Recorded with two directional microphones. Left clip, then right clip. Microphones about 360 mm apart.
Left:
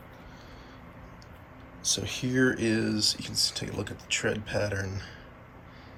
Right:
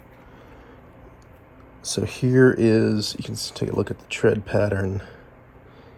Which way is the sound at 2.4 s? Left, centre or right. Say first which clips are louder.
Right 10 dB; centre.